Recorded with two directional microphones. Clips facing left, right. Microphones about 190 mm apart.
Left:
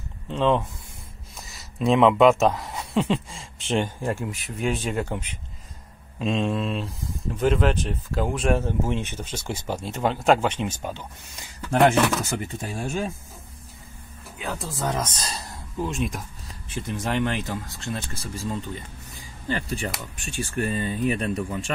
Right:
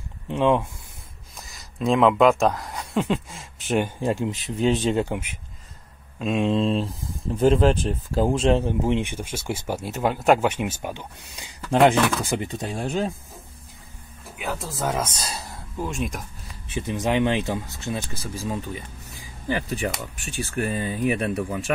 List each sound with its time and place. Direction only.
0.3 s speech: 15° right (ahead or behind)
1.3 s speech: centre (ahead or behind)
4.0 s speech: 20° right (ahead or behind)
6.1 s speech: 5° right (ahead or behind)
6.4 s speech: 25° right (ahead or behind)
14.4 s speech: 5° right (ahead or behind)
16.7 s speech: 15° right (ahead or behind)